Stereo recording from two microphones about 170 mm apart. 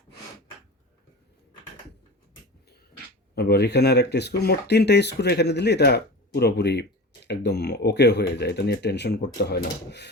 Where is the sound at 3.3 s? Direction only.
75° left (ahead or behind).